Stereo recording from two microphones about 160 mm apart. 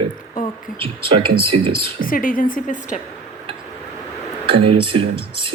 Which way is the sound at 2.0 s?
60° left (ahead or behind).